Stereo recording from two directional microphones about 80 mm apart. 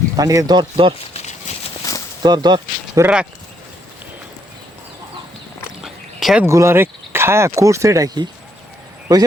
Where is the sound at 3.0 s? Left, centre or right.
Right.